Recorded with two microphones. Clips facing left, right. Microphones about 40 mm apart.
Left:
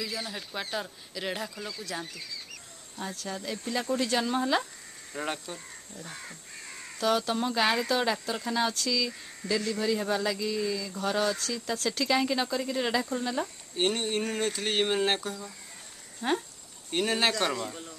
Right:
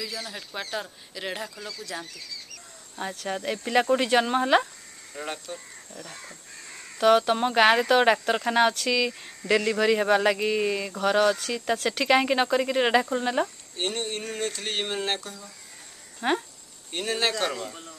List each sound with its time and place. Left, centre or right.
0.0 s speech: centre
3.0 s speech: right
5.1 s speech: centre
7.0 s speech: right
9.5 s speech: right
13.7 s speech: centre
16.2 s speech: right
16.9 s speech: centre